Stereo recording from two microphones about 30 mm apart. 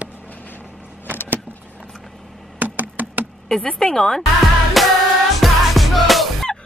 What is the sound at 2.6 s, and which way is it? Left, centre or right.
Computer keyboard, right.